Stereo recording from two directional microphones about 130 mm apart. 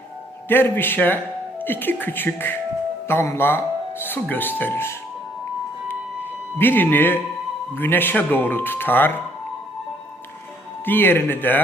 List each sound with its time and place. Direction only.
0.4 s speech: 15° left (ahead or behind)
6.6 s speech: 15° left (ahead or behind)
10.8 s speech: 15° left (ahead or behind)